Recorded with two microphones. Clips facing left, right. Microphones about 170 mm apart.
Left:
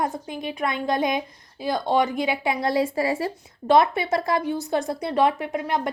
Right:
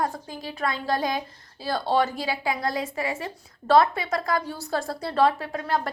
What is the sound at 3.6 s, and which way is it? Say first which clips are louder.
A woman's voice: left 1 dB; 20° left (ahead or behind).